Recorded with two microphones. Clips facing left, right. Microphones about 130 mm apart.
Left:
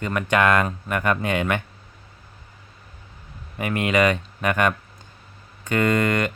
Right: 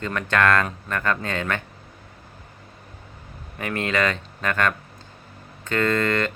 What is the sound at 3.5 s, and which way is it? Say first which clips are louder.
Speech: left 3 dB; 10° left (ahead or behind).